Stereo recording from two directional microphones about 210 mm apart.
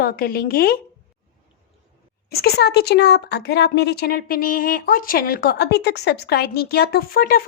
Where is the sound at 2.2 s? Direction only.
45° left (ahead or behind).